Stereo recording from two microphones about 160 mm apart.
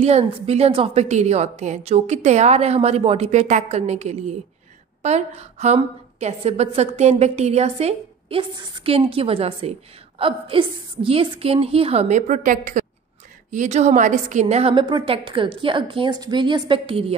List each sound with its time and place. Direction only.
0.0 s a woman's voice: 40° right (ahead or behind)